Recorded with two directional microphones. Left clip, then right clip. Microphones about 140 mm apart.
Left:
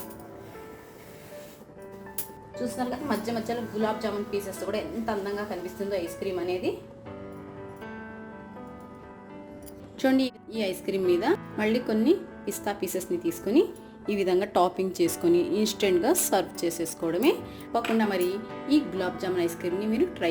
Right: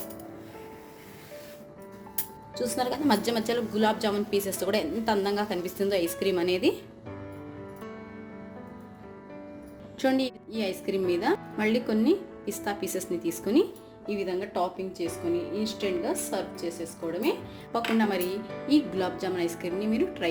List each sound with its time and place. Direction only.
3.1 s a woman's voice: 70° right (ahead or behind)
10.0 s speech: 5° left (ahead or behind)
14.1 s speech: 50° left (ahead or behind)
17.9 s speech: centre (ahead or behind)